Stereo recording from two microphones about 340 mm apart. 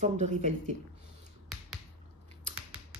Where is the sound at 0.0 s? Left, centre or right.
Right.